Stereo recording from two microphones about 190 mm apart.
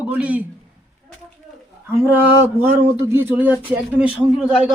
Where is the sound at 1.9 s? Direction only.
10° right (ahead or behind).